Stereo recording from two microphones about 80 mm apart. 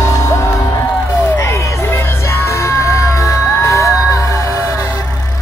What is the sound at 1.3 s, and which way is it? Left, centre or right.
Music, left.